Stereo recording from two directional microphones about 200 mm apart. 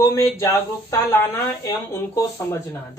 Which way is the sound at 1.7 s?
15° left (ahead or behind).